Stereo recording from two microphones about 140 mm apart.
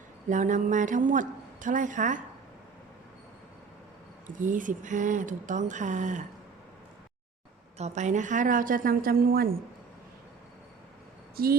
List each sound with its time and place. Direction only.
0.3 s a woman's voice: 65° right (ahead or behind)
4.4 s a woman's voice: 65° right (ahead or behind)
7.8 s a woman's voice: 55° right (ahead or behind); by 9.5 s 90° right
11.4 s a sound: 90° right